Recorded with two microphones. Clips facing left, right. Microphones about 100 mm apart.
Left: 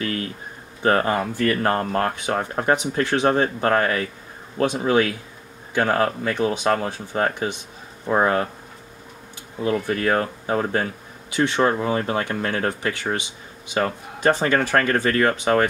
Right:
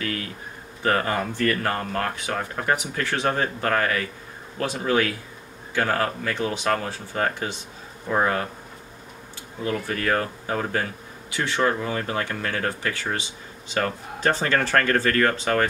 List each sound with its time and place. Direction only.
0.8 s speech: 25° left (ahead or behind)
9.6 s speech: 25° left (ahead or behind)